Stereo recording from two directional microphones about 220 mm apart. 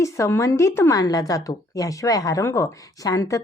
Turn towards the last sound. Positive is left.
turn(degrees=15)  # may be behind; listen again after turning